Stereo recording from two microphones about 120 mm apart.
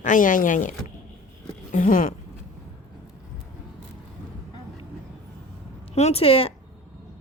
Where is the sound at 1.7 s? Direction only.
90° left.